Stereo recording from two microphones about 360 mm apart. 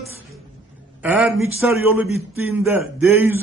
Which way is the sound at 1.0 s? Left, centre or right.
Centre.